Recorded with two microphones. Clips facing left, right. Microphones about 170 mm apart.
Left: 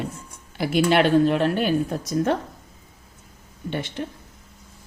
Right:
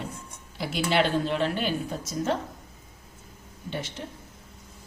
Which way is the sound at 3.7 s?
60° left (ahead or behind).